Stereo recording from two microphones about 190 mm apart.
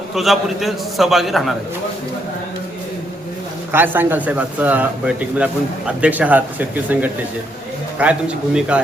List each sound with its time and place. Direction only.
0.1 s a man's voice: centre (ahead or behind)
3.7 s a man's voice: 10° right (ahead or behind)